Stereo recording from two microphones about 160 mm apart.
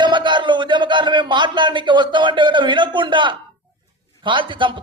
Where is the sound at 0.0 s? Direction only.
30° right (ahead or behind).